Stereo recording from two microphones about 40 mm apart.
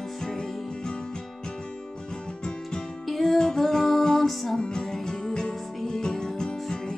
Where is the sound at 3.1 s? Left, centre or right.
Centre.